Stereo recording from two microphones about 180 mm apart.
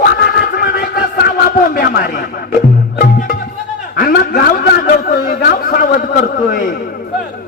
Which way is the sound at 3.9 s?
55° left (ahead or behind).